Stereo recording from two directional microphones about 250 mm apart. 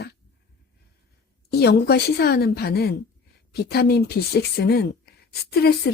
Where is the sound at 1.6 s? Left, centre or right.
Left.